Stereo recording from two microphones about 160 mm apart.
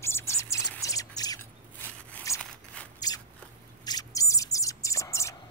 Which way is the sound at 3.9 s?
25° left (ahead or behind).